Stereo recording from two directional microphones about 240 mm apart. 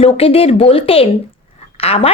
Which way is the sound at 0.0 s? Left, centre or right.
Left.